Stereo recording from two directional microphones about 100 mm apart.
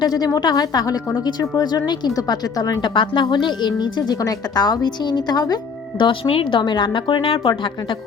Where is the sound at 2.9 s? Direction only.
55° left (ahead or behind).